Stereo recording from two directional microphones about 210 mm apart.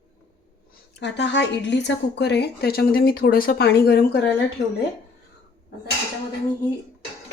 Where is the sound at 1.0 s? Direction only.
55° left (ahead or behind).